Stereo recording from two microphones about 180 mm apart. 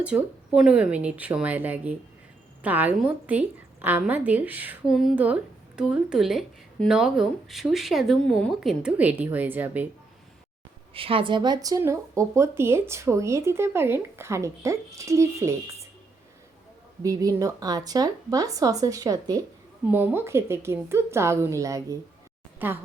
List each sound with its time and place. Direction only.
0.0 s speech: 5° right (ahead or behind)
10.9 s speech: 30° right (ahead or behind)
17.0 s a woman's voice: 20° right (ahead or behind)